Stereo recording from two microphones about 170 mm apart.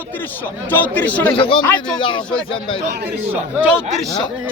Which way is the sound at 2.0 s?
30° left (ahead or behind).